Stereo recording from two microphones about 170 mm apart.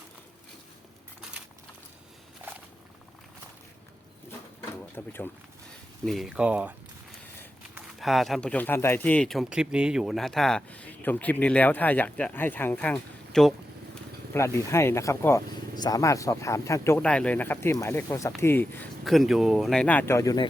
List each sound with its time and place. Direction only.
4.3 s a sound: 10° left (ahead or behind)
6.1 s speech: centre (ahead or behind)
7.8 s speech: centre (ahead or behind)
14.3 s speech: 15° left (ahead or behind)
19.0 s speech: centre (ahead or behind); by 20.5 s 20° left (ahead or behind)